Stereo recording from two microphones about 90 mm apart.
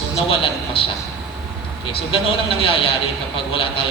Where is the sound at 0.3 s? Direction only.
80° left.